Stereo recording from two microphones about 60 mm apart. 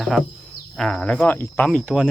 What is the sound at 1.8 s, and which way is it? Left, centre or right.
Speech, centre.